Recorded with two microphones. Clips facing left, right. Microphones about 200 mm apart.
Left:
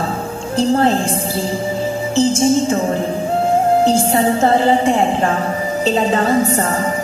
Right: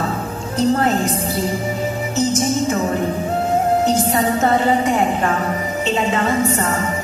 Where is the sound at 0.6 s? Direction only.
30° left (ahead or behind).